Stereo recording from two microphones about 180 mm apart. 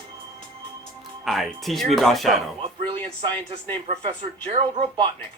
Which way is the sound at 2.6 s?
30° right (ahead or behind).